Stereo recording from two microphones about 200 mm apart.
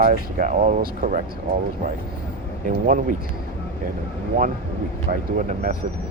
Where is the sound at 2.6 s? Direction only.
45° right (ahead or behind).